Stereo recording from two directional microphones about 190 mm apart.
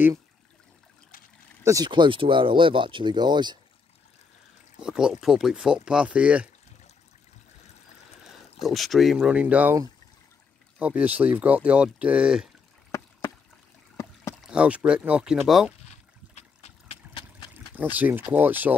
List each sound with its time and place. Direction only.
1.6 s speech: 15° right (ahead or behind)
4.7 s speech: 5° right (ahead or behind)
8.2 s speech: centre (ahead or behind)
14.4 s speech: 5° right (ahead or behind)
16.3 s trickle: 35° left (ahead or behind)
17.6 s speech: 10° right (ahead or behind)